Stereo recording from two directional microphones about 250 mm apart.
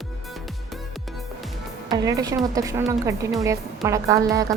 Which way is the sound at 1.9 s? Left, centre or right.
Centre.